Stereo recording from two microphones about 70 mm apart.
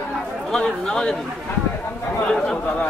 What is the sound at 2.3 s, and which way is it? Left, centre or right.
Chatter, centre.